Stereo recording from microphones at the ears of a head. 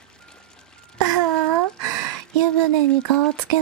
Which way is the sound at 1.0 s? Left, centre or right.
Right.